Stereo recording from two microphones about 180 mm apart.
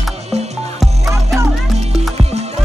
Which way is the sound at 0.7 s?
Centre (ahead or behind).